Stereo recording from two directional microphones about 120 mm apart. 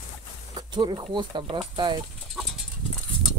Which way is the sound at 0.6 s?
40° right (ahead or behind).